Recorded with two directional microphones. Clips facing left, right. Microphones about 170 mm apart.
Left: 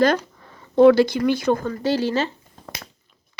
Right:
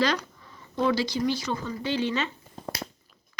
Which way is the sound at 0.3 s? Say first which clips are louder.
Left 14 dB; 60° left (ahead or behind).